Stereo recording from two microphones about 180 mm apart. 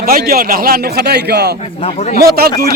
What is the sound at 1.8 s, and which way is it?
Speech, 40° left (ahead or behind).